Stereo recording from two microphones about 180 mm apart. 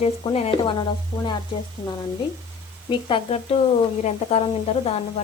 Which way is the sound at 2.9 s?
30° left (ahead or behind).